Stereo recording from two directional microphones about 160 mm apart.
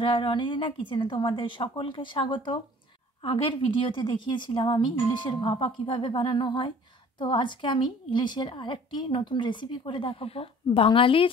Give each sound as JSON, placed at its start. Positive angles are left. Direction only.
{"t": 0.0, "sound": "a woman's voice", "side_deg": 30}